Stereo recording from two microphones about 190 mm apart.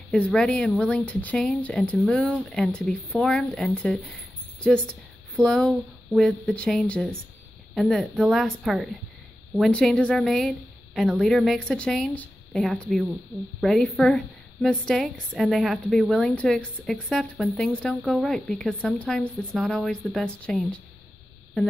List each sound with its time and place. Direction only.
0.1 s a woman's voice: 5° left (ahead or behind)